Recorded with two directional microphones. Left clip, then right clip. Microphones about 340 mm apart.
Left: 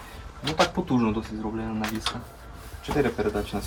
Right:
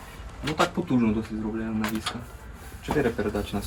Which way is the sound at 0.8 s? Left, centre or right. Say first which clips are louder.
Left 1 dB; centre.